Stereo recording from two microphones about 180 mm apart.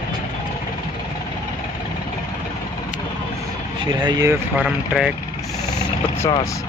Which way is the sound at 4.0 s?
20° right (ahead or behind).